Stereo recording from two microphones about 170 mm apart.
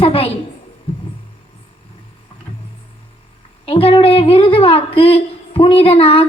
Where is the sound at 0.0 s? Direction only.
35° left (ahead or behind).